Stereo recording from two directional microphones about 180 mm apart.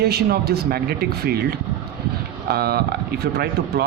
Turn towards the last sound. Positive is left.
turn(degrees=-65)  # may be behind; listen again after turning